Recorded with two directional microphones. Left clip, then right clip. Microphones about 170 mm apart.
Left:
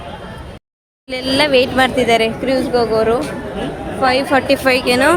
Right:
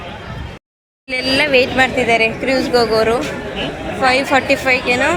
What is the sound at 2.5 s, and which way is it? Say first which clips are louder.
Speech: right 1 dB; 10° left (ahead or behind).